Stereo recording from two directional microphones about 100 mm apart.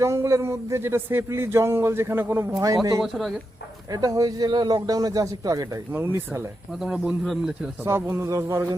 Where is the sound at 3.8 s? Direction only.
40° right (ahead or behind).